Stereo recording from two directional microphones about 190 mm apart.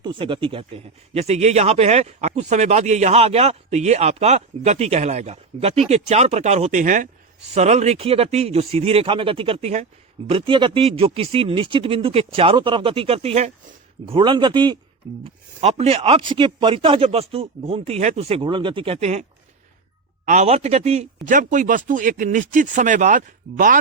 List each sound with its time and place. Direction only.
0.0 s speech: 25° right (ahead or behind)
20.2 s speech: 40° right (ahead or behind)